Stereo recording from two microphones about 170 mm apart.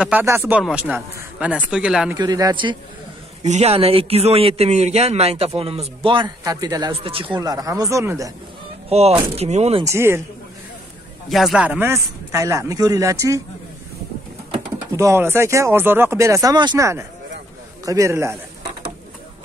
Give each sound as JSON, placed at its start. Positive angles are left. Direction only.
{"t": 0.0, "sound": "speech", "side_deg": -10}
{"t": 2.1, "sound": "a man's voice", "side_deg": -20}
{"t": 3.4, "sound": "a man's voice", "side_deg": -40}
{"t": 8.8, "sound": "a man's voice", "side_deg": -35}
{"t": 9.8, "sound": "speech", "side_deg": -15}
{"t": 11.2, "sound": "speech", "side_deg": 0}
{"t": 15.0, "sound": "speech", "side_deg": -15}